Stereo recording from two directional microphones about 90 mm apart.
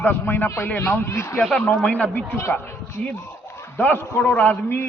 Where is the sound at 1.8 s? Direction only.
15° left (ahead or behind).